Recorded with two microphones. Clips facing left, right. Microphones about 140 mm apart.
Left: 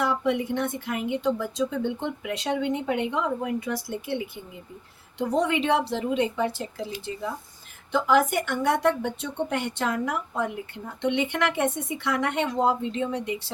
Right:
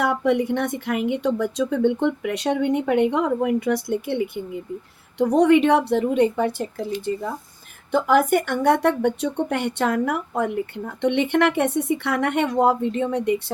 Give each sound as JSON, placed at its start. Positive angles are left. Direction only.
{"t": 0.0, "sound": "speech", "side_deg": -60}
{"t": 5.4, "sound": "speech", "side_deg": -60}